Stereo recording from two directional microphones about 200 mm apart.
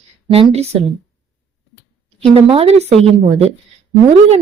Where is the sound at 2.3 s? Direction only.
30° right (ahead or behind).